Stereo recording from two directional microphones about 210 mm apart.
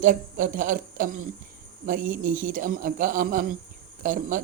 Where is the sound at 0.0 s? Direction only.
40° right (ahead or behind).